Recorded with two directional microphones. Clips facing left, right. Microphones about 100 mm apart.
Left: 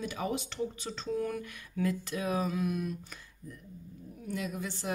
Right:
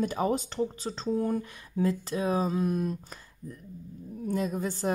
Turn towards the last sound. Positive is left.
turn(degrees=-40)  # may be behind; listen again after turning